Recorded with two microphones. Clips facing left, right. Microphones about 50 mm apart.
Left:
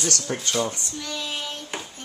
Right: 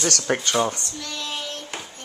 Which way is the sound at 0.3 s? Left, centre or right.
Right.